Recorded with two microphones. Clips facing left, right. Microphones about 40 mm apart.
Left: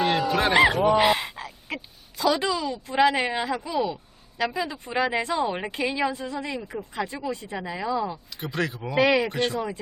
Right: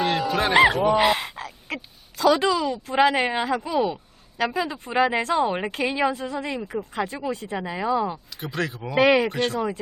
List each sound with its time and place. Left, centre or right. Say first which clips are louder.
0.0 s fowl: even; centre
2.3 s speech: right 4 dB; centre
6.6 s speech: right 4 dB; centre
6.9 s speech: right 1 dB; centre
8.4 s speech: left 1 dB; centre
9.0 s speech: right 3 dB; centre
9.2 s speech: right 2 dB; centre